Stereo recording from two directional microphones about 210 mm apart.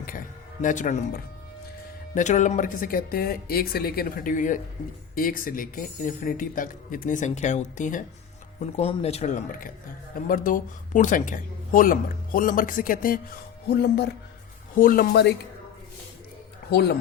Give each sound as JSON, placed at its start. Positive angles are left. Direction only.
{"t": 0.6, "sound": "speech", "side_deg": 35}
{"t": 16.6, "sound": "speech", "side_deg": 50}